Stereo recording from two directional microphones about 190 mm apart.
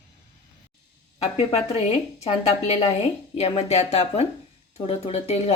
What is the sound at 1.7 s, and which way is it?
A woman's voice, 35° left (ahead or behind).